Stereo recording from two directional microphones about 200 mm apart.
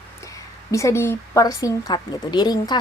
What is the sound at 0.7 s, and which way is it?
A woman's voice, 15° left (ahead or behind).